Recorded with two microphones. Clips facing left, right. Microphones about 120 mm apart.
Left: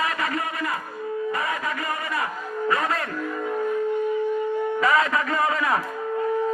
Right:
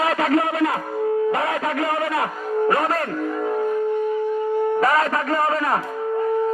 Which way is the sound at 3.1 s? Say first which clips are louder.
Right 4 dB; 30° right (ahead or behind).